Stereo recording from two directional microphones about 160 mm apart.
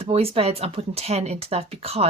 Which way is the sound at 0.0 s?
40° right (ahead or behind).